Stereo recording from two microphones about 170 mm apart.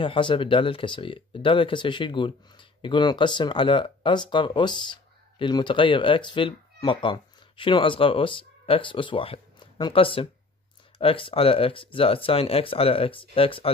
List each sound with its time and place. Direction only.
0.0 s speech: 30° left (ahead or behind)